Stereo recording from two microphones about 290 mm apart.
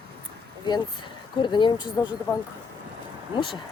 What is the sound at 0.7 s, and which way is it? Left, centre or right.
Speech, centre.